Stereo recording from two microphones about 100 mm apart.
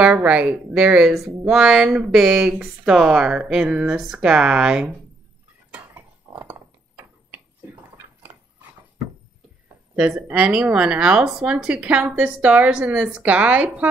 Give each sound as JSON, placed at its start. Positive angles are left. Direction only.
{"t": 0.0, "sound": "speech", "side_deg": -15}
{"t": 5.7, "sound": "dishes", "side_deg": -15}
{"t": 7.2, "sound": "a sound", "side_deg": -20}
{"t": 9.9, "sound": "speech", "side_deg": -10}